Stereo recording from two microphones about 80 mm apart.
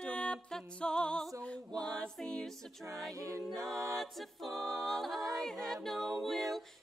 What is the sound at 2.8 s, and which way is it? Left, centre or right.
Music, right.